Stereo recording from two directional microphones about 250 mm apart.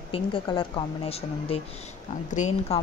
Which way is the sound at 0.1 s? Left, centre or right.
Left.